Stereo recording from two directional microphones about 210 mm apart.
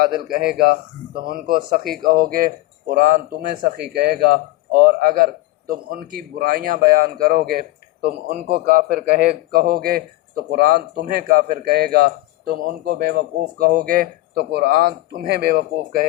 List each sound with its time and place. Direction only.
0.0 s speech: 45° right (ahead or behind)